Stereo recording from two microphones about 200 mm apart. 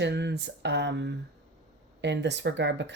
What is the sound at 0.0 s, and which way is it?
Speech, 60° right (ahead or behind).